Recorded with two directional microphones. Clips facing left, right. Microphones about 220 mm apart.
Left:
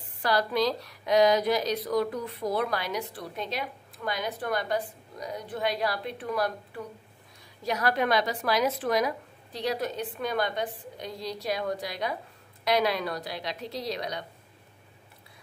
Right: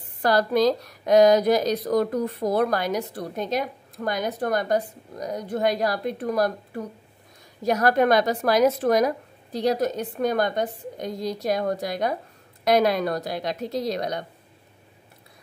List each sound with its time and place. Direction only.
0.2 s a woman's voice: 45° right (ahead or behind)